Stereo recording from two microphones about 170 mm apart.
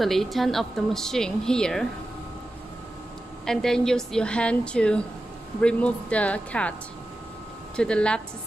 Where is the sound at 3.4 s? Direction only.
5° left (ahead or behind).